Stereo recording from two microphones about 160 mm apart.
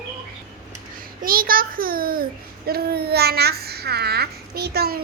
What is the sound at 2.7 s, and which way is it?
A child's voice, 75° right (ahead or behind).